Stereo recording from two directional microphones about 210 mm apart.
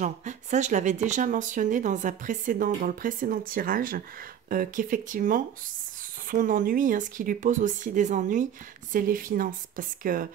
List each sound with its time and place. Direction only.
0.0 s speech: 35° right (ahead or behind)